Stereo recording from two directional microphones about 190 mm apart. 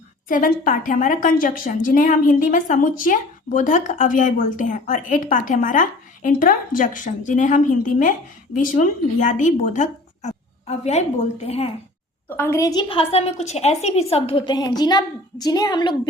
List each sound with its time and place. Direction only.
0.3 s a woman's voice: 45° left (ahead or behind)
12.3 s a woman's voice: 10° left (ahead or behind)